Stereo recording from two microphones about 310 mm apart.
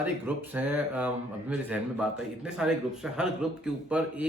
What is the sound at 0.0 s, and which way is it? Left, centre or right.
Speech, centre.